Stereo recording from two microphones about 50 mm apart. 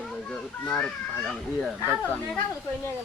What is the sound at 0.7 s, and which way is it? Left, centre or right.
Speech, centre.